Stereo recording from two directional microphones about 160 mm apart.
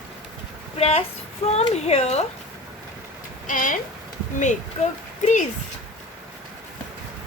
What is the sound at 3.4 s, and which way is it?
Speech, 55° left (ahead or behind).